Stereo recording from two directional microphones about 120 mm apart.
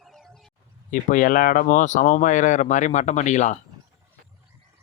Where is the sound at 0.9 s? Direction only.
90° left.